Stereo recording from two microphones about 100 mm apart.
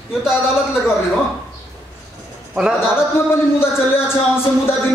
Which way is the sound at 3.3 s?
25° left (ahead or behind).